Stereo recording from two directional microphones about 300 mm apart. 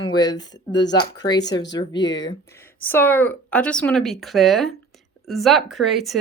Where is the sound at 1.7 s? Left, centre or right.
Centre.